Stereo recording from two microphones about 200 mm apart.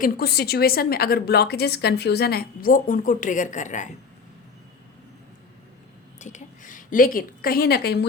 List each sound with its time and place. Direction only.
0.0 s a woman's voice: 50° left (ahead or behind)
6.1 s a woman's voice: 35° left (ahead or behind); by 8.0 s 55° left (ahead or behind)